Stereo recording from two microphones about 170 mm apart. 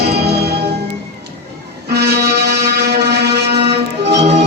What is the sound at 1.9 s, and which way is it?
Music, 75° right (ahead or behind).